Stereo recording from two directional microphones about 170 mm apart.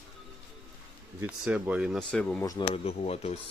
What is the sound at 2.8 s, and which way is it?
Speech, 35° left (ahead or behind).